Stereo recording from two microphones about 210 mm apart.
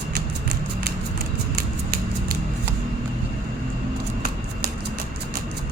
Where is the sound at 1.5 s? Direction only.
45° right (ahead or behind).